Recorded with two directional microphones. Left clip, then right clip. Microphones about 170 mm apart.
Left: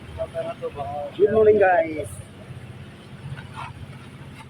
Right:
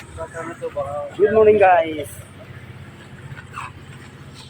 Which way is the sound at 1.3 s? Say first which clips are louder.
Right 4 dB; 10° right (ahead or behind).